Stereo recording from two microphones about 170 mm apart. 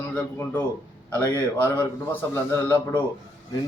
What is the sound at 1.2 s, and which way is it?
A man's voice, 10° left (ahead or behind).